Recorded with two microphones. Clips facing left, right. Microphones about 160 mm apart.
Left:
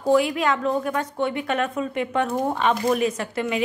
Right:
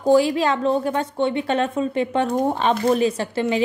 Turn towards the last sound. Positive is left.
turn(degrees=-30)  # may be behind; listen again after turning